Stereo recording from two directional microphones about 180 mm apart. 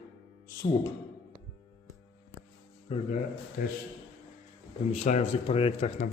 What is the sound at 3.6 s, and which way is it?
Speech, 50° left (ahead or behind).